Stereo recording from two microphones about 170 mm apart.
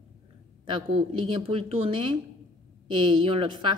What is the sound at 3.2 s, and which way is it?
Speech, 30° right (ahead or behind).